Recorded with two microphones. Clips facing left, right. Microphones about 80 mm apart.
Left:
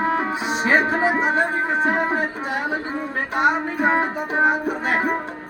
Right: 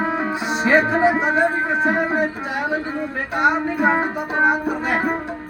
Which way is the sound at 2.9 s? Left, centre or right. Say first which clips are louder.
Right 1 dB; centre.